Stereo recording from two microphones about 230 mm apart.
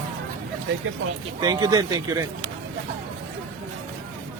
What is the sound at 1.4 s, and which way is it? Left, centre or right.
Speech, centre.